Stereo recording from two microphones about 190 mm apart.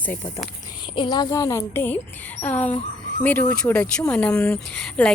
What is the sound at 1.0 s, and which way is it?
A woman's voice, 20° left (ahead or behind).